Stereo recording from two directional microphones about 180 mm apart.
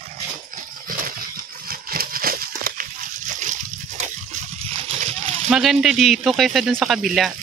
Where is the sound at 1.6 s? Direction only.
55° right (ahead or behind); by 5.0 s 35° right (ahead or behind).